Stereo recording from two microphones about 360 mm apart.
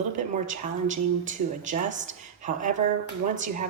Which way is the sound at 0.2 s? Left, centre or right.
Right.